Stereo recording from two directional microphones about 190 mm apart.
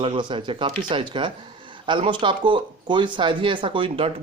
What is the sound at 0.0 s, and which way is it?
Speech, 25° right (ahead or behind).